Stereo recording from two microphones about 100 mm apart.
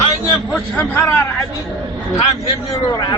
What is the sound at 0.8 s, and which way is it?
Speech, 25° left (ahead or behind).